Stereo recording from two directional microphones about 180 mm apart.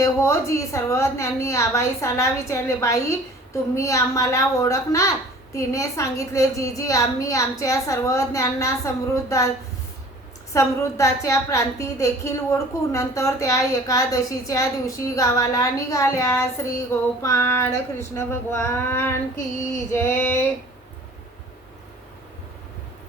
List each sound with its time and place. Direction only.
0.0 s a woman's voice: 15° left (ahead or behind)
10.5 s a woman's voice: 15° left (ahead or behind)